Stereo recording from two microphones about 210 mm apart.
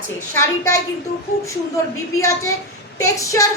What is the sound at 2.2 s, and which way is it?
A child's voice, 15° left (ahead or behind).